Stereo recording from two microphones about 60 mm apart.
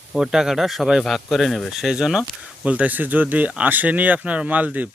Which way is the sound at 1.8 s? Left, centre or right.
Centre.